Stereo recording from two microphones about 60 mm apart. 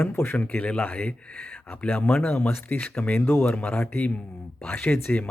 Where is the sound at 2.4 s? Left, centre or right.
Left.